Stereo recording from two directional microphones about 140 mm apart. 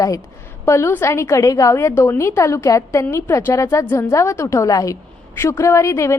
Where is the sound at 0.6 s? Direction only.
20° left (ahead or behind).